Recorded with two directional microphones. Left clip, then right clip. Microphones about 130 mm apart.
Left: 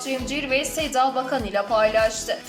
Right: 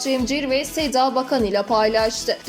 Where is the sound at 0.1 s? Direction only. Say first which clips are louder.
Right 3 dB; 45° right (ahead or behind).